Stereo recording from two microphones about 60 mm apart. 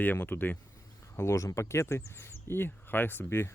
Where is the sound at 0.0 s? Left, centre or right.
Left.